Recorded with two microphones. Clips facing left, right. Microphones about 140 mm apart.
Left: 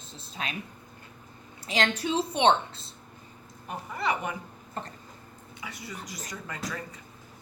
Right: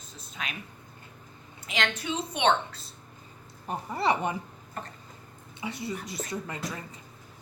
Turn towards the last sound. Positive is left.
turn(degrees=-25)  # may be behind; listen again after turning